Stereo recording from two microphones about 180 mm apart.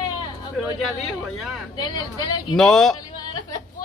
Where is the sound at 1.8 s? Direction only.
20° left (ahead or behind).